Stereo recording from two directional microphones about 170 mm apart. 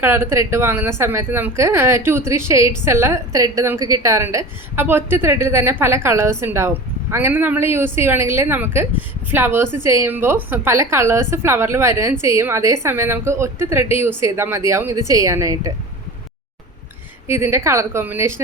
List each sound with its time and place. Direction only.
0.0 s a woman's voice: 15° right (ahead or behind)
17.2 s a woman's voice: 15° right (ahead or behind)